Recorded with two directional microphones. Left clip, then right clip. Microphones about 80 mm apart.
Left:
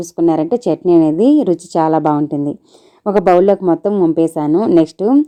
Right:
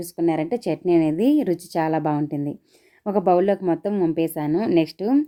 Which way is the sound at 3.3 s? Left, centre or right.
Left.